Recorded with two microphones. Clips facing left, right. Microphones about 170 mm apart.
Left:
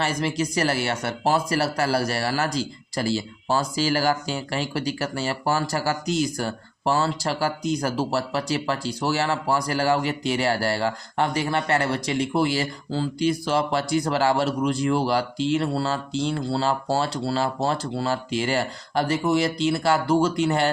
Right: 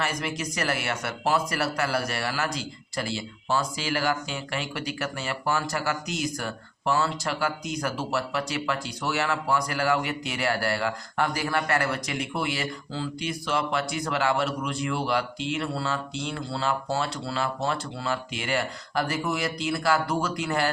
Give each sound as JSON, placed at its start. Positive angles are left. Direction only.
{"t": 0.0, "sound": "speech", "side_deg": 30}